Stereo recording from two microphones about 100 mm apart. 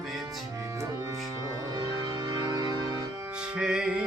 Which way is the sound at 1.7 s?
45° right (ahead or behind).